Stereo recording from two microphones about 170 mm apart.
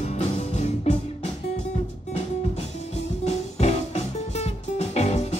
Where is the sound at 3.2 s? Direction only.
40° left (ahead or behind).